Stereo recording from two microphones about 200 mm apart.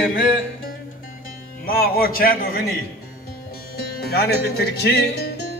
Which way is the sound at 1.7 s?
50° left (ahead or behind).